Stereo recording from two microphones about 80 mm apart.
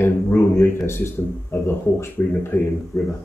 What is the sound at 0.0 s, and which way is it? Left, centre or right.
Speech, left.